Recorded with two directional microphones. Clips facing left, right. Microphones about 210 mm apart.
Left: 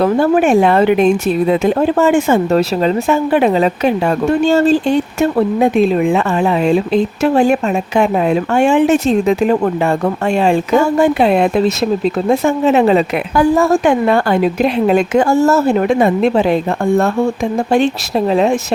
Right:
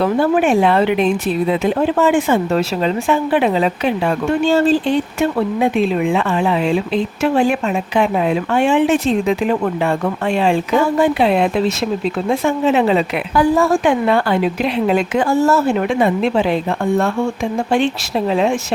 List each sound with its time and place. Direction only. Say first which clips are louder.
0.0 s speech: left 3 dB; 45° left (ahead or behind)
17.7 s speech: left 3 dB; 40° left (ahead or behind)